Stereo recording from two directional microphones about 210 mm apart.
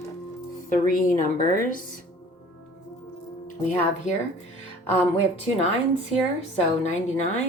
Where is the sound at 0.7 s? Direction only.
40° left (ahead or behind).